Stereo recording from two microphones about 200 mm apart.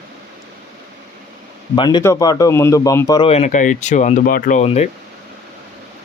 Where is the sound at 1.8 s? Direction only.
20° left (ahead or behind); by 4.7 s 40° left (ahead or behind).